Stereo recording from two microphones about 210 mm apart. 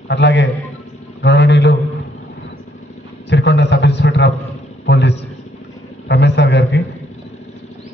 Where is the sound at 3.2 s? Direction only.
55° left (ahead or behind).